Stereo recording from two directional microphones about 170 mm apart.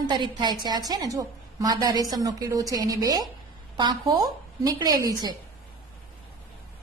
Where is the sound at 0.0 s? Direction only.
25° right (ahead or behind).